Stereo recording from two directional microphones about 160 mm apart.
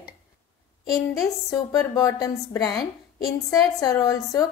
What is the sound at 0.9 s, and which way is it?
A woman's voice, 20° left (ahead or behind).